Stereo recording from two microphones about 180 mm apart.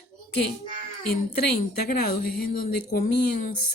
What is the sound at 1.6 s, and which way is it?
Speech, 55° left (ahead or behind).